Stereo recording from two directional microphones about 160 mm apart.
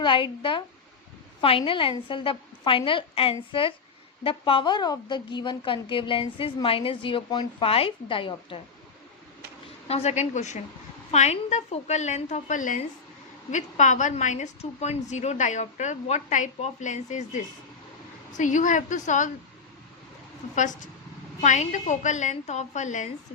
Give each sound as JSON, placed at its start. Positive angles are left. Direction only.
{"t": 0.0, "sound": "a woman's voice", "side_deg": 30}
{"t": 9.9, "sound": "a woman's voice", "side_deg": 45}
{"t": 20.6, "sound": "a woman's voice", "side_deg": 50}